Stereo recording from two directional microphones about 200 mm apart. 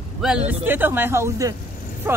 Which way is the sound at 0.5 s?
10° right (ahead or behind).